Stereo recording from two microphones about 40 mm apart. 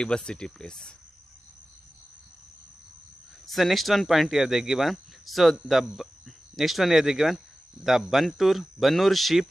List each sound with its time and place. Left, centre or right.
0.0 s speech: left
3.4 s speech: centre